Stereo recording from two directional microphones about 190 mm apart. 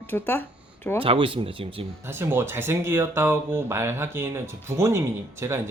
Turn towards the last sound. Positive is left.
turn(degrees=-15)  # may be behind; listen again after turning